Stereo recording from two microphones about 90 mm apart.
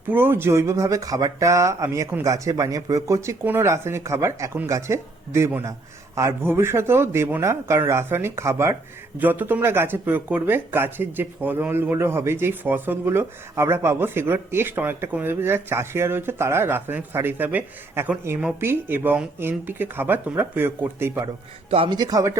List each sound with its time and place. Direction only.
0.1 s speech: 25° right (ahead or behind)
21.7 s speech: 90° right
21.9 s speech: 50° right (ahead or behind)